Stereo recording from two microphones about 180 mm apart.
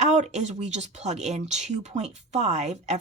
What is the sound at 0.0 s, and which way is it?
Speech, 40° right (ahead or behind).